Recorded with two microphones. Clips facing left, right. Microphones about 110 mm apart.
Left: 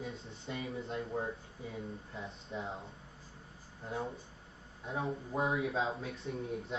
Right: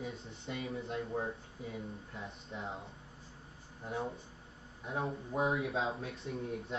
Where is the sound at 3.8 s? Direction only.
Centre (ahead or behind).